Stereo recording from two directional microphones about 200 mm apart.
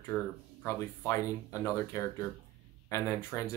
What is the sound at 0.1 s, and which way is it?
Speech, 5° left (ahead or behind).